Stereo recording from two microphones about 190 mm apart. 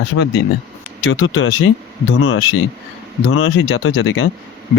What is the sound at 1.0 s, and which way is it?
Speech, 90° left.